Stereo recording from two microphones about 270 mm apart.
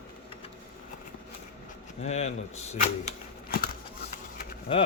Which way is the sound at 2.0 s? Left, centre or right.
Left.